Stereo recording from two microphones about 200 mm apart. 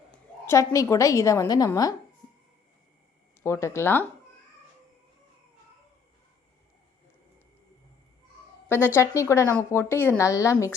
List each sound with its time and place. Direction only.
0.1 s a woman's voice: 15° left (ahead or behind)
3.4 s speech: 15° left (ahead or behind)
8.6 s speech: 10° left (ahead or behind)